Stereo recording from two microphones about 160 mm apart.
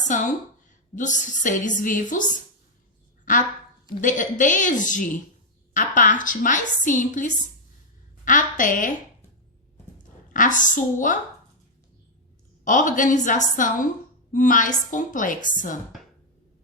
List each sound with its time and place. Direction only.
0.1 s a woman's voice: 50° left (ahead or behind)
10.0 s speech: 55° left (ahead or behind)
12.6 s a woman's voice: 55° left (ahead or behind)